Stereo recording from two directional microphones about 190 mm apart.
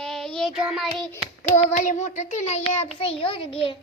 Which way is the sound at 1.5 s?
40° left (ahead or behind).